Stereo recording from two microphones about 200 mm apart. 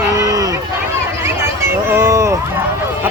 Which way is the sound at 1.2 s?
15° right (ahead or behind).